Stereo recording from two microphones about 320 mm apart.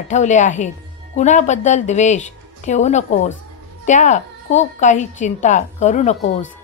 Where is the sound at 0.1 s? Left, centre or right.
Left.